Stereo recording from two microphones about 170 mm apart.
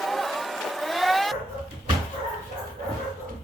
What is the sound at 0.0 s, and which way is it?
Vehicle, centre (ahead or behind).